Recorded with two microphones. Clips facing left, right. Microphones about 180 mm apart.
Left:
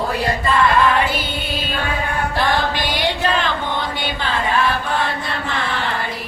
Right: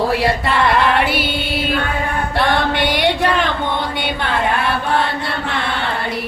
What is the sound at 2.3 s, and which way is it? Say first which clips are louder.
Chant: right 3 dB; 65° right (ahead or behind).